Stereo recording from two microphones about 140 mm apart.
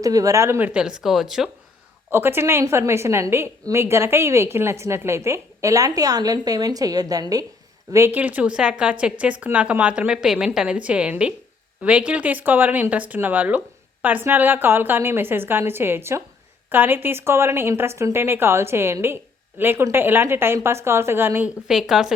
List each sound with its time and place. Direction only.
0.0 s a woman's voice: 25° right (ahead or behind)
0.7 s speech: 5° right (ahead or behind)
2.0 s a woman's voice: 15° right (ahead or behind)
7.9 s speech: 15° right (ahead or behind)
21.7 s speech: 5° right (ahead or behind)